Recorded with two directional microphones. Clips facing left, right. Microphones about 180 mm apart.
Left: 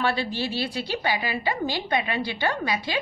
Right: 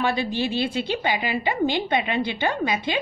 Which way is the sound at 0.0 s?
15° right (ahead or behind).